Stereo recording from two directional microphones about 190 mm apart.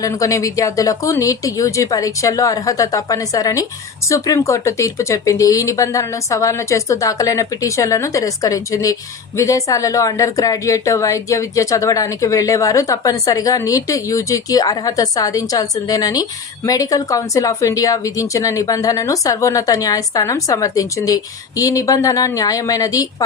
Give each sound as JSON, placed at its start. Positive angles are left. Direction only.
{"t": 0.0, "sound": "a woman's voice", "side_deg": 15}